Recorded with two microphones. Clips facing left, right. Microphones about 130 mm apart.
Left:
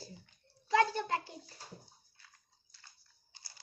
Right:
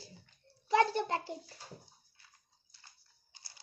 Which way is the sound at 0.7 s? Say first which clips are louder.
Right 1 dB; 25° right (ahead or behind).